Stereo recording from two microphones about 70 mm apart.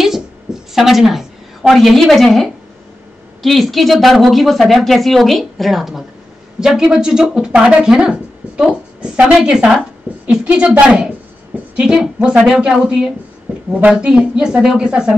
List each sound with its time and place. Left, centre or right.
0.7 s a woman's voice: centre